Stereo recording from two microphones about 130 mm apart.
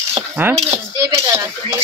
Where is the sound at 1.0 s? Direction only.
20° right (ahead or behind).